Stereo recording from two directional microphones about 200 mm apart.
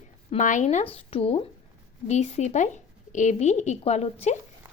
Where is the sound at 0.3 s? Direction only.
40° left (ahead or behind).